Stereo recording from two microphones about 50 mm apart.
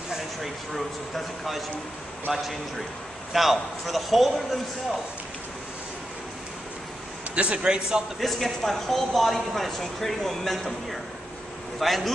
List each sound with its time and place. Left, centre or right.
0.1 s a man's voice: centre
7.3 s a man's voice: right
8.2 s speech: centre